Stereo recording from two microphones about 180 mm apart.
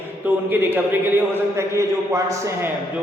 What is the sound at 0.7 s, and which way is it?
A capella, 10° right (ahead or behind).